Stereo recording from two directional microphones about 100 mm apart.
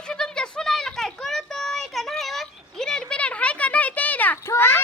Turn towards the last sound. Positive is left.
turn(degrees=20)  # may be behind; listen again after turning